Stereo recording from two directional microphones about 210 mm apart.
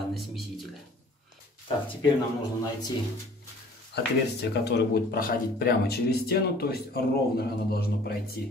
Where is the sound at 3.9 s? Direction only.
50° left (ahead or behind).